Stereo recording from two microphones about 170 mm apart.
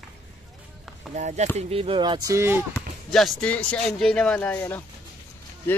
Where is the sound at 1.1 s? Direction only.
45° right (ahead or behind); by 2.6 s 15° right (ahead or behind).